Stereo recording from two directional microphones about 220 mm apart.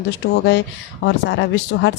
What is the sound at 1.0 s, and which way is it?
Speech, 50° left (ahead or behind).